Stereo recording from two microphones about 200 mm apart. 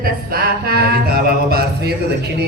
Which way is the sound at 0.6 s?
50° right (ahead or behind).